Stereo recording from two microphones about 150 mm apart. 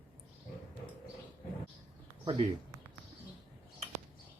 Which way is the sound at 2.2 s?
30° right (ahead or behind).